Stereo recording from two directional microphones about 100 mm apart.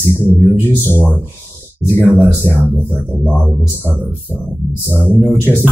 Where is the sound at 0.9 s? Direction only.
20° left (ahead or behind).